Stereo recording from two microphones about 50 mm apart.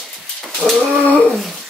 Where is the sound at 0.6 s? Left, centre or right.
Right.